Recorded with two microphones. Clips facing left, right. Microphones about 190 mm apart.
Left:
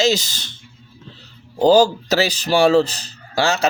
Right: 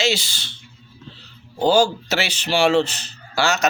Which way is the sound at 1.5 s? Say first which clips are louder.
Left 4 dB; 35° left (ahead or behind).